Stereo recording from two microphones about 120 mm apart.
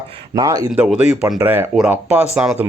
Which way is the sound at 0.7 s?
5° right (ahead or behind).